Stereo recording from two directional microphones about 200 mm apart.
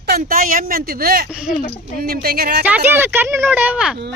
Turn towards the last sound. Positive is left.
turn(degrees=-5)  # may be behind; listen again after turning